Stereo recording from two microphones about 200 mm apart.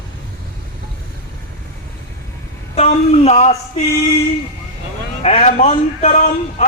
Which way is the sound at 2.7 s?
35° left (ahead or behind).